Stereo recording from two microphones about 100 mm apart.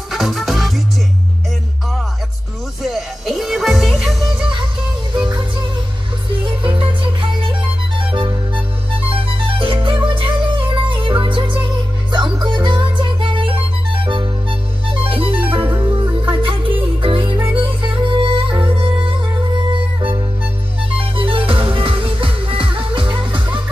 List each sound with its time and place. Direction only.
0.1 s music: centre (ahead or behind)
2.8 s music: centre (ahead or behind)
6.4 s music: 60° right (ahead or behind)
15.0 s music: 65° right (ahead or behind)
21.2 s music: 60° right (ahead or behind)